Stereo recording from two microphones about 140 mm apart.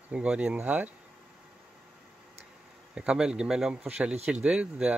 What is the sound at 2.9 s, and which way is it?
Speech, 5° right (ahead or behind).